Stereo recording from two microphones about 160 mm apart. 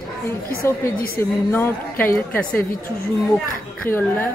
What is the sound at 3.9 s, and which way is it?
Speech, 15° left (ahead or behind).